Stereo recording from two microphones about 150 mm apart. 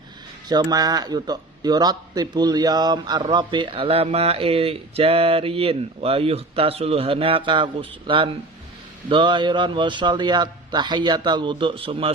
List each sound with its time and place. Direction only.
0.4 s speech: 30° right (ahead or behind)